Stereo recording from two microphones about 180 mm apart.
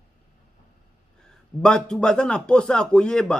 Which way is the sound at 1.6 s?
5° left (ahead or behind).